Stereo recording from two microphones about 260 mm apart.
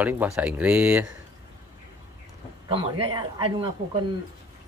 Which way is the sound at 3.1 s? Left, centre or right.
Centre.